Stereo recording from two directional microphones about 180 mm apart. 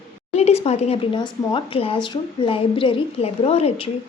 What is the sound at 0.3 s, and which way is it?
A woman's voice, 35° left (ahead or behind).